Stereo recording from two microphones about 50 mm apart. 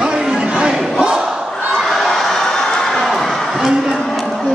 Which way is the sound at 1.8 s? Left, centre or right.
Centre.